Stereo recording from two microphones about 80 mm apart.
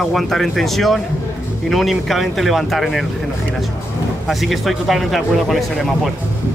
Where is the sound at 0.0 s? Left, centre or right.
Centre.